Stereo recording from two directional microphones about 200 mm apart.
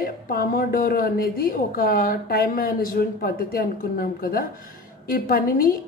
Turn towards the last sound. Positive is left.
turn(degrees=45)  # may be behind; listen again after turning